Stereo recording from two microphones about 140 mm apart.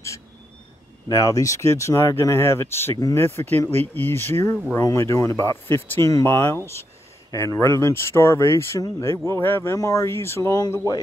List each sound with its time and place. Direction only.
1.0 s speech: 25° left (ahead or behind)